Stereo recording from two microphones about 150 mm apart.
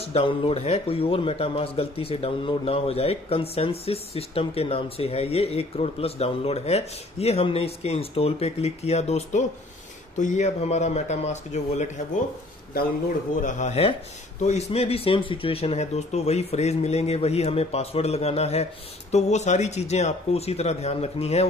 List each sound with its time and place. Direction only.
0.0 s speech: 40° left (ahead or behind)
13.4 s speech: 55° left (ahead or behind)